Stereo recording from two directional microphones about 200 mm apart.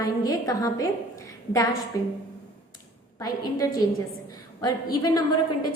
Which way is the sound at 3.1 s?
20° left (ahead or behind).